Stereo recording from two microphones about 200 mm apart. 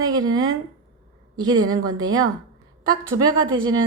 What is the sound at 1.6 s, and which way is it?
Speech, 20° right (ahead or behind).